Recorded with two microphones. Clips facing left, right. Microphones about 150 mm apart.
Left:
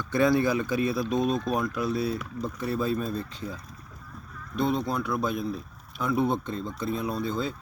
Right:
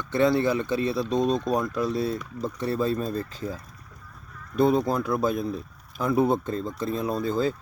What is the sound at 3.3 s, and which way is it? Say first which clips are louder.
Speech: right 4 dB; centre (ahead or behind).